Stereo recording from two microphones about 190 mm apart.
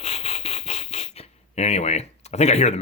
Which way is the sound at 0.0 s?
35° left (ahead or behind).